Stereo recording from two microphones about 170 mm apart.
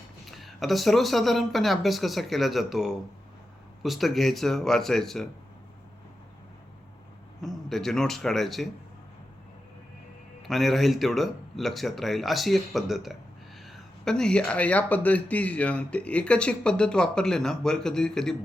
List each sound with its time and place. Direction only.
0.3 s speech: centre (ahead or behind)
7.4 s speech: centre (ahead or behind)
10.4 s speech: centre (ahead or behind)